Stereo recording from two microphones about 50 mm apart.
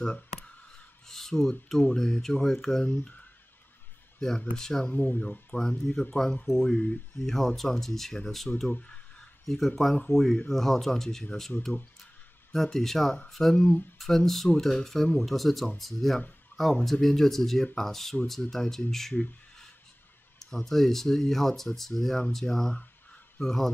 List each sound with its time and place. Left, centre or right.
1.0 s speech: centre
2.8 s speech: left
4.6 s speech: centre
5.1 s speech: left
8.6 s speech: left
9.5 s speech: centre
16.5 s a sound: left
16.8 s speech: centre
20.3 s speech: centre